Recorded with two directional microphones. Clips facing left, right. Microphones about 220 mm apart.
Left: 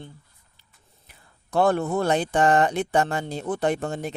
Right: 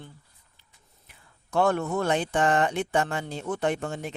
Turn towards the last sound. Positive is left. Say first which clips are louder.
# left 3 dB
turn(degrees=35)  # may be behind; listen again after turning